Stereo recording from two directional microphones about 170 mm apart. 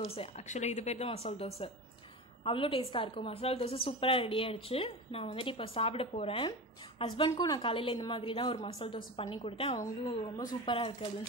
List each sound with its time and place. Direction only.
0.0 s a woman's voice: 35° left (ahead or behind)